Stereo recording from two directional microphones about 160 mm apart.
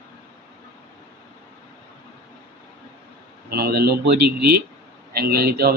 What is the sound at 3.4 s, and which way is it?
A man's voice, 75° right (ahead or behind).